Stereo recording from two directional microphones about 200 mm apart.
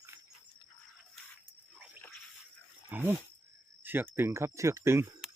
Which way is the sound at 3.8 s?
10° right (ahead or behind).